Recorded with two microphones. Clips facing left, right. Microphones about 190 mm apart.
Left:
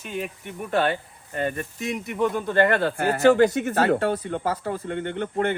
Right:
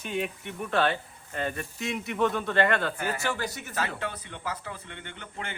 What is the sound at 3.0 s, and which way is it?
Speech, 60° left (ahead or behind).